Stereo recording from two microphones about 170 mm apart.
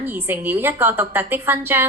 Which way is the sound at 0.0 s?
15° right (ahead or behind).